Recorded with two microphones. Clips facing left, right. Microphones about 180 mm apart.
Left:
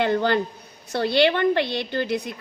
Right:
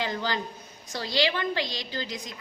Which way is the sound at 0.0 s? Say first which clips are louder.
Left 9 dB; 60° left (ahead or behind).